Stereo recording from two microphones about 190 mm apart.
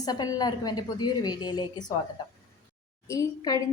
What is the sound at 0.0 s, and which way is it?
A woman's voice, 20° left (ahead or behind).